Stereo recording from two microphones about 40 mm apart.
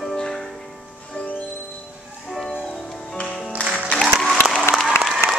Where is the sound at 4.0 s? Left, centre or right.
Centre.